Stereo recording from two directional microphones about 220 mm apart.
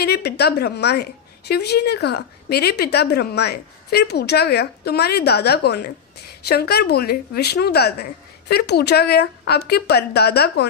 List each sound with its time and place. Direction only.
0.0 s a woman's voice: 45° left (ahead or behind)